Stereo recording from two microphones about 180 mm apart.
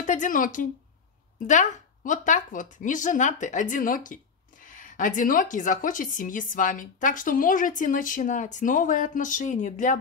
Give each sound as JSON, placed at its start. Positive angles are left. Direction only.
{"t": 0.0, "sound": "speech", "side_deg": 45}